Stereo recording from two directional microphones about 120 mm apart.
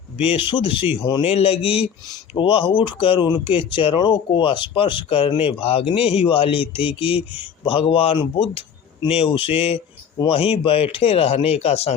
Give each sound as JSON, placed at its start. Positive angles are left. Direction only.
{"t": 0.2, "sound": "speech", "side_deg": 50}